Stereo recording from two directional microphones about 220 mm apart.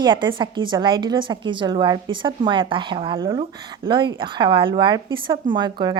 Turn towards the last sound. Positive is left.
turn(degrees=-20)  # may be behind; listen again after turning